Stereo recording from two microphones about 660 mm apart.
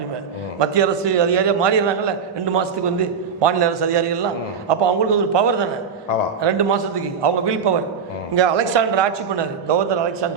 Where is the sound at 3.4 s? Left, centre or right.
Right.